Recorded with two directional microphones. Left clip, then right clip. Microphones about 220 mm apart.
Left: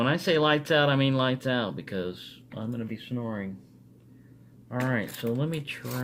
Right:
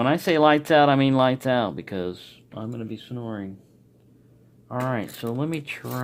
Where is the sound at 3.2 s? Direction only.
65° right (ahead or behind).